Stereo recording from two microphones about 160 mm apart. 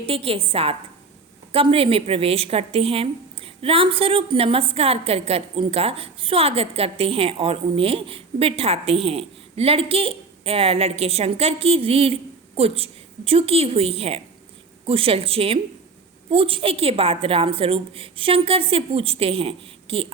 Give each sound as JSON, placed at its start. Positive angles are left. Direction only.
{"t": 0.0, "sound": "a woman's voice", "side_deg": -35}